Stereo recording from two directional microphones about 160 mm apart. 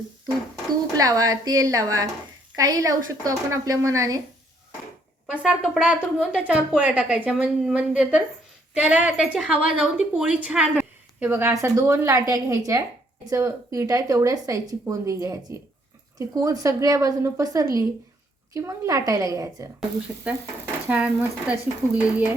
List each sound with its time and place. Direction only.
0.9 s speech: 20° right (ahead or behind)
5.4 s a woman's voice: 5° right (ahead or behind); by 19.7 s 20° right (ahead or behind)
20.8 s a woman's voice: 10° right (ahead or behind)